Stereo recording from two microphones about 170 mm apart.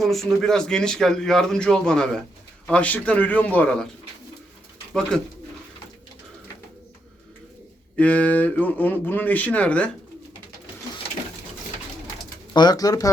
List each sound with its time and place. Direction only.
0.0 s a man's voice: centre (ahead or behind)
7.9 s speech: 10° left (ahead or behind)
12.5 s speech: 25° left (ahead or behind)